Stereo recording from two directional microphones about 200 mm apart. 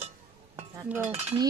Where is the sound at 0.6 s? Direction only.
10° right (ahead or behind).